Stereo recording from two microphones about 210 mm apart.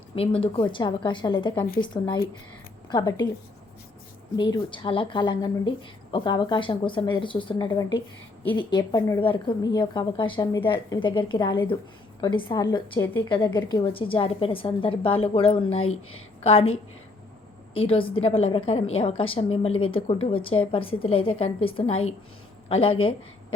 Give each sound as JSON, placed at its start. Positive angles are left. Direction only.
{"t": 0.2, "sound": "speech", "side_deg": 25}
{"t": 2.9, "sound": "speech", "side_deg": 20}
{"t": 4.4, "sound": "speech", "side_deg": 20}
{"t": 13.2, "sound": "a woman's voice", "side_deg": 20}
{"t": 17.7, "sound": "speech", "side_deg": 25}